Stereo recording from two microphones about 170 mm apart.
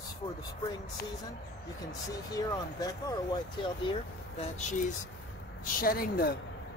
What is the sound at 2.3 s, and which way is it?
Speech, 20° left (ahead or behind).